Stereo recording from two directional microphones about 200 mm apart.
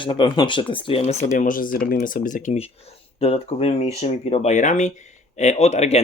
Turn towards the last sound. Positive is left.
turn(degrees=30)  # may be behind; listen again after turning